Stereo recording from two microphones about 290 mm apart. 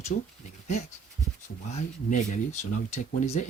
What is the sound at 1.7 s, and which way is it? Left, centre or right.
Speech, left.